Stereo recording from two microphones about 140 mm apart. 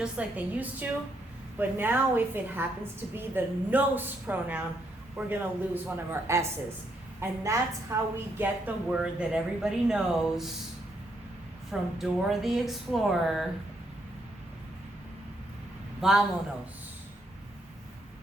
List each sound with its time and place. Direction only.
0.0 s a woman's voice: 10° right (ahead or behind)
8.4 s speech: 10° right (ahead or behind)
11.7 s speech: centre (ahead or behind)
16.0 s a man's voice: 5° right (ahead or behind)